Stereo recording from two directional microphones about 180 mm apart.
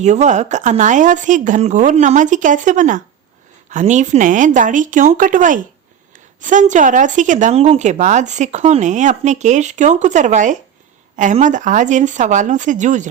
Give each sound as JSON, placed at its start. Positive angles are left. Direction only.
{"t": 0.0, "sound": "speech", "side_deg": -40}